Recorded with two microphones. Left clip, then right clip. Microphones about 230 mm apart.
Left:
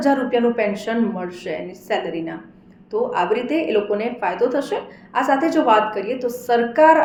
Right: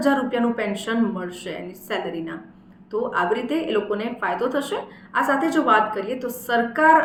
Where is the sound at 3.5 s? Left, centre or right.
Centre.